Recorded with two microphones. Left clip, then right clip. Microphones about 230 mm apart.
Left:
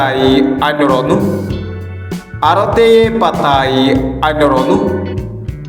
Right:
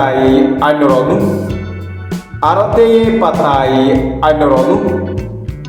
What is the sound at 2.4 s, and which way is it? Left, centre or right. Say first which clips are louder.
A man's voice: even; left.